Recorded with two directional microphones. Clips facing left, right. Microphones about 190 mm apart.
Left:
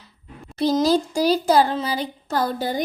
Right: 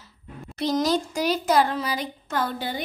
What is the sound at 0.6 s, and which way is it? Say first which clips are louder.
Speech: left 4 dB; 30° left (ahead or behind).